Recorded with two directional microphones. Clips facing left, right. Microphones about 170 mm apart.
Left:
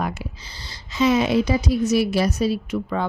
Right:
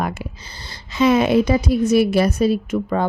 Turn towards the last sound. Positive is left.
turn(degrees=-50)  # may be behind; listen again after turning